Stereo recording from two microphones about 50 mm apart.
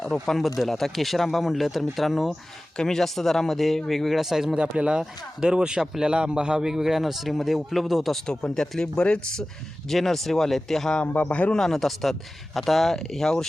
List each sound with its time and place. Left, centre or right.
0.0 s speech: centre
0.4 s speech: centre
2.7 s speech: centre
4.5 s a man's voice: right
5.8 s speech: centre
6.1 s a man's voice: centre
8.5 s speech: centre
9.9 s speech: centre
11.0 s a man's voice: left
11.5 s speech: centre